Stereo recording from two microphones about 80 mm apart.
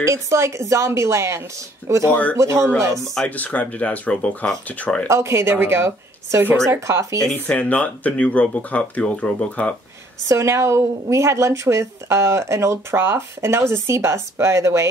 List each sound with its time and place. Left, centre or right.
0.0 s a woman's voice: right
3.3 s speech: centre
5.0 s a woman's voice: right
7.2 s speech: centre
10.2 s a woman's voice: right